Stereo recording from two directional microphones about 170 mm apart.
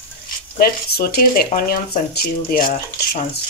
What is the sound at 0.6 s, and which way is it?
Speech, 60° left (ahead or behind).